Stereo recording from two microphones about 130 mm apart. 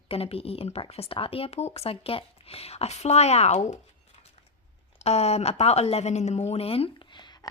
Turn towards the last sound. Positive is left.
turn(degrees=35)  # may be behind; listen again after turning